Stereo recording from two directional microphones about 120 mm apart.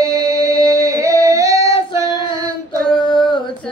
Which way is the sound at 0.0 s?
25° right (ahead or behind).